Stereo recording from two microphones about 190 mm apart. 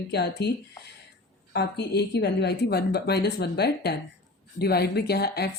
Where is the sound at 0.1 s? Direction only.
60° left (ahead or behind).